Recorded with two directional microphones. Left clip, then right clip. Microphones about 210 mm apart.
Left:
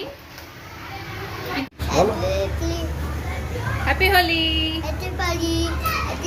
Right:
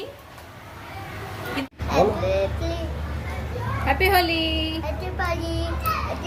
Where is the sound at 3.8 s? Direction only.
40° right (ahead or behind).